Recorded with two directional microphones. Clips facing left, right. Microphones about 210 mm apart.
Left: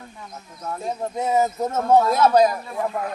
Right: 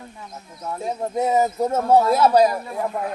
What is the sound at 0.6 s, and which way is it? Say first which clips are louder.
Speech: right 1 dB; 10° right (ahead or behind).